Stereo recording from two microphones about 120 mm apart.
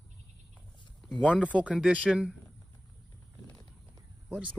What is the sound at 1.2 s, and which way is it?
Speech, 10° left (ahead or behind).